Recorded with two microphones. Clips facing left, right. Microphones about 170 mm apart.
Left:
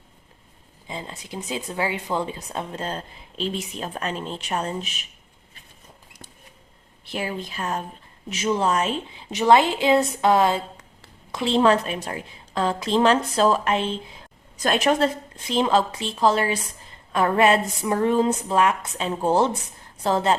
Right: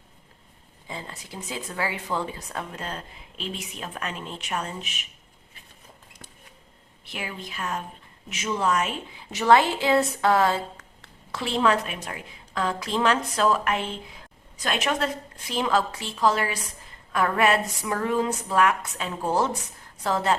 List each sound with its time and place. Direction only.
0.9 s speech: 20° left (ahead or behind); by 5.0 s 35° left (ahead or behind)
7.0 s a woman's voice: 35° left (ahead or behind)
14.5 s speech: 40° left (ahead or behind); by 20.3 s 25° left (ahead or behind)